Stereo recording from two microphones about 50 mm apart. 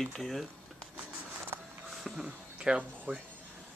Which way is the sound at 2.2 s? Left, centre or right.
Centre.